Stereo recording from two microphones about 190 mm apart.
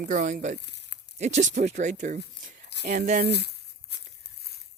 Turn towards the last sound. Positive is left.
turn(degrees=60)  # may be behind; listen again after turning